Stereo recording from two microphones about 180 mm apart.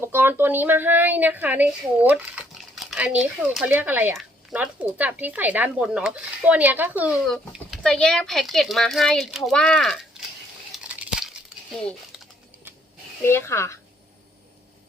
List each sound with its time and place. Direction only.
0.0 s a woman's voice: 10° right (ahead or behind)
7.3 s a child's voice: centre (ahead or behind)
10.8 s crumpling: 5° right (ahead or behind)
13.2 s speech: 15° left (ahead or behind)